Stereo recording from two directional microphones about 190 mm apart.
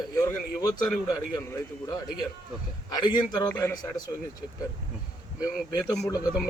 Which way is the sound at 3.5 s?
15° left (ahead or behind).